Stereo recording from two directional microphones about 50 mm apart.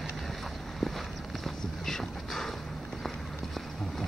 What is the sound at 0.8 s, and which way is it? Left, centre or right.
Walk, centre.